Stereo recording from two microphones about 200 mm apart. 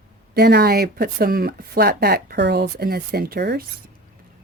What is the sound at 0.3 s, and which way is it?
Speech, 50° right (ahead or behind).